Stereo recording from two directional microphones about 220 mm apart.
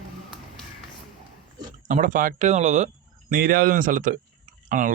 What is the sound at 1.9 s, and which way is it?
Speech, 35° right (ahead or behind).